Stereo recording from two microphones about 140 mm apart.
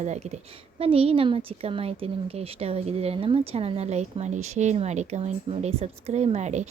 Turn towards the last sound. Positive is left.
turn(degrees=-55)  # may be behind; listen again after turning